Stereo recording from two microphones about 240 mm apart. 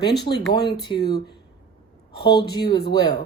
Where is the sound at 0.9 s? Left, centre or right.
Left.